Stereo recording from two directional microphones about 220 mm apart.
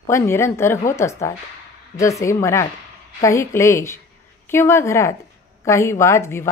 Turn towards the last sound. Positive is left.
turn(degrees=10)  # may be behind; listen again after turning